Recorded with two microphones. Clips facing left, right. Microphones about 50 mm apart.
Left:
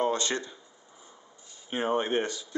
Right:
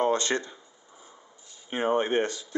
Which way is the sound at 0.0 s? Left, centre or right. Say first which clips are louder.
Right 3 dB; right.